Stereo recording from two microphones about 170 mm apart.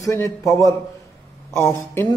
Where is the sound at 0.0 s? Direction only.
20° left (ahead or behind).